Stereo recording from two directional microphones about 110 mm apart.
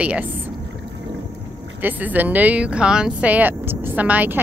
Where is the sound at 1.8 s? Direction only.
15° right (ahead or behind).